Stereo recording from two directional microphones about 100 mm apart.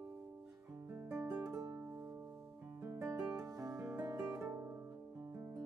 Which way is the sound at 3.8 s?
15° right (ahead or behind).